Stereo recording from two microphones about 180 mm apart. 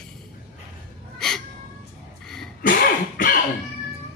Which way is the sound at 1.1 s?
5° left (ahead or behind).